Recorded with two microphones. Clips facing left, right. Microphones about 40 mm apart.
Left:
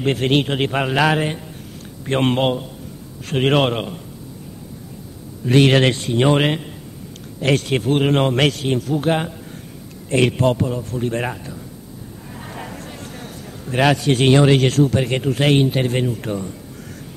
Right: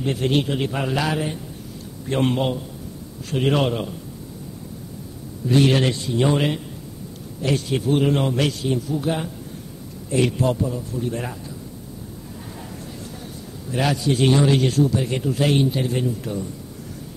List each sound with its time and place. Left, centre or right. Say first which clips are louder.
0.0 s a man's voice: left 3 dB; left
5.4 s a man's voice: left 4 dB; left